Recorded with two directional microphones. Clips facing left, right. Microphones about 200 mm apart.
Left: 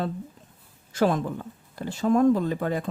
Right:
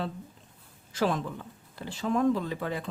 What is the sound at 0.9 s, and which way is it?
Speech, 45° left (ahead or behind).